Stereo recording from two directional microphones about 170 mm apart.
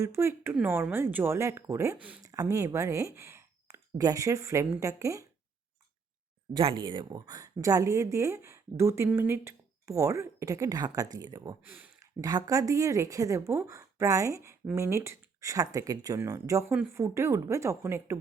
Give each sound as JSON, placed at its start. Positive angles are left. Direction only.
{"t": 0.0, "sound": "speech", "side_deg": -15}
{"t": 2.2, "sound": "speech", "side_deg": -20}
{"t": 6.5, "sound": "speech", "side_deg": -30}
{"t": 12.2, "sound": "speech", "side_deg": -20}